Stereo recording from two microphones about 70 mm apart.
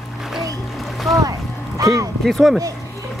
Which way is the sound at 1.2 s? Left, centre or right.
Right.